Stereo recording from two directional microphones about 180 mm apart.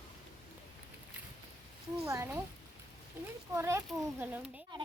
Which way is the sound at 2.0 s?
15° right (ahead or behind).